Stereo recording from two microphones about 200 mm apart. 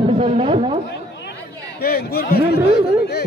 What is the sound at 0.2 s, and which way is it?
Speech, 30° right (ahead or behind).